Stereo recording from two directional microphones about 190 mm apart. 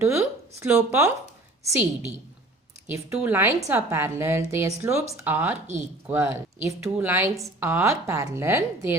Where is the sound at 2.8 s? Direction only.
10° right (ahead or behind).